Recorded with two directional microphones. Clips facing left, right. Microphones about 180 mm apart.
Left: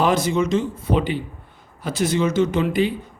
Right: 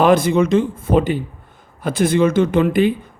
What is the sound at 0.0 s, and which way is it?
Speech, 55° right (ahead or behind).